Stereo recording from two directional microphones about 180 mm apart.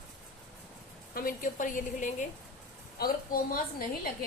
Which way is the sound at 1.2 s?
50° left (ahead or behind).